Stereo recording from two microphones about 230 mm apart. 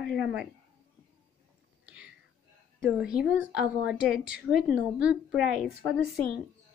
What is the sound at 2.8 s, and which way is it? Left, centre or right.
Speech, centre.